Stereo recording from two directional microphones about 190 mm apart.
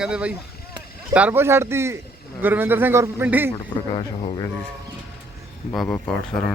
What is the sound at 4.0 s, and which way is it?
Speech, 30° left (ahead or behind).